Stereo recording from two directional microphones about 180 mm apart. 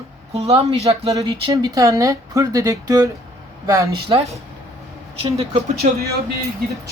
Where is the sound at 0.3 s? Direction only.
35° right (ahead or behind).